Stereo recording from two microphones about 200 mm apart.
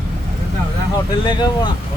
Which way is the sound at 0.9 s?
20° left (ahead or behind).